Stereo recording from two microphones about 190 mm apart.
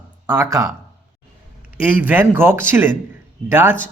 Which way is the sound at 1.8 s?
10° right (ahead or behind).